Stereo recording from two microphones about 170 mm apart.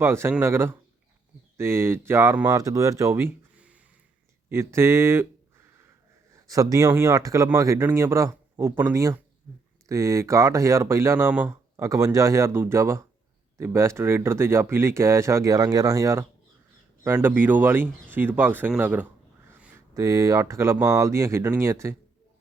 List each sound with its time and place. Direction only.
0.0 s speech: 15° right (ahead or behind)
6.3 s speech: 20° right (ahead or behind)